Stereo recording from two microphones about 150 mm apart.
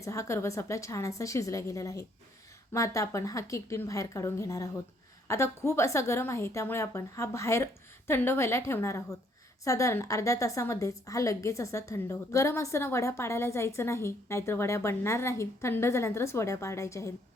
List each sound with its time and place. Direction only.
0.0 s a woman's voice: 20° left (ahead or behind)